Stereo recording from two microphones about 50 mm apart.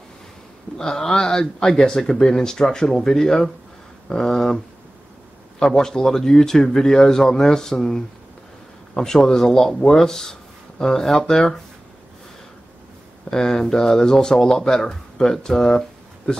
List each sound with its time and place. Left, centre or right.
0.7 s speech: centre
5.6 s speech: centre
13.3 s speech: centre